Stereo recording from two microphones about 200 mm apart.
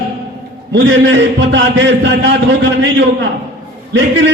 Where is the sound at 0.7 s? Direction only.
65° right (ahead or behind).